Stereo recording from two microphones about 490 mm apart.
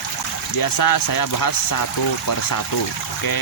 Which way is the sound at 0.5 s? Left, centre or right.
Left.